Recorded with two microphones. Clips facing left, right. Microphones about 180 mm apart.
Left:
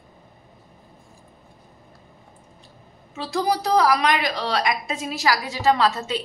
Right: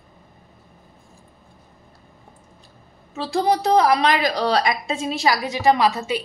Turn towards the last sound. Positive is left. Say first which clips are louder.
# right 2 dB
turn(degrees=-10)  # may be behind; listen again after turning